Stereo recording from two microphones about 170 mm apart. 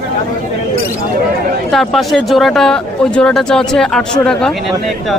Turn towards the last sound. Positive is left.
turn(degrees=0)  # may be behind; listen again after turning